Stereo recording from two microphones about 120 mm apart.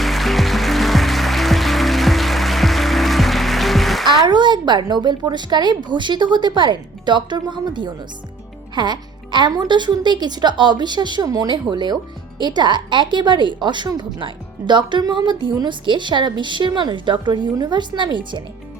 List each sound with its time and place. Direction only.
0.0 s music: centre (ahead or behind)
4.3 s a woman's voice: 40° right (ahead or behind)